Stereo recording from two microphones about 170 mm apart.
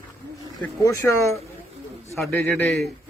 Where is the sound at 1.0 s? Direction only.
15° left (ahead or behind).